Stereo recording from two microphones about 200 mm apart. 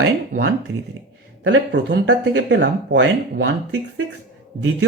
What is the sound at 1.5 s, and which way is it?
Speech, 60° right (ahead or behind).